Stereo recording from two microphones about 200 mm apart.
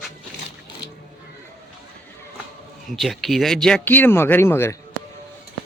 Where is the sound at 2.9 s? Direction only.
Centre (ahead or behind).